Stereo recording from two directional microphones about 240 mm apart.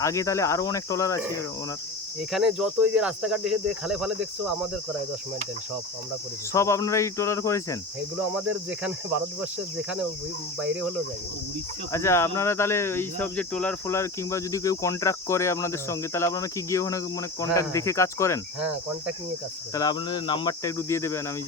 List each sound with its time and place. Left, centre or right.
0.0 s speech: centre
2.3 s cricket: centre
6.5 s speech: centre
8.4 s cricket: centre
11.9 s speech: centre
19.7 s speech: centre